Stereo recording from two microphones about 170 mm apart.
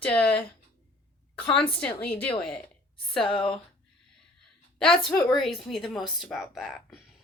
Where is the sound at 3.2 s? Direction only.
5° left (ahead or behind).